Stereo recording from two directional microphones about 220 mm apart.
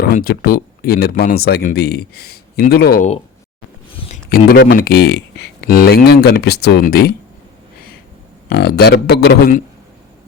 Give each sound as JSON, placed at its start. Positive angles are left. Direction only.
{"t": 0.0, "sound": "speech", "side_deg": 40}
{"t": 4.3, "sound": "speech", "side_deg": 40}
{"t": 8.4, "sound": "speech", "side_deg": 45}